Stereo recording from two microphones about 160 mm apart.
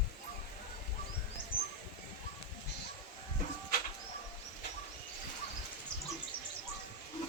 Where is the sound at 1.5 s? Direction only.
65° left (ahead or behind).